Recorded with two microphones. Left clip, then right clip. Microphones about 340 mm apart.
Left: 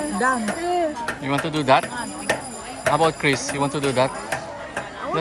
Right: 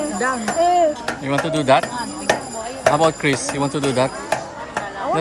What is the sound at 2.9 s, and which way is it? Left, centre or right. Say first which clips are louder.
Speech: right 2 dB; centre.